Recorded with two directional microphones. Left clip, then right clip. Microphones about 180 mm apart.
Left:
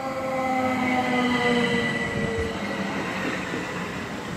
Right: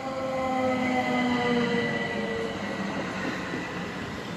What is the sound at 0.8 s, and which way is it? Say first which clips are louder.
Train: left 3 dB; 40° right (ahead or behind).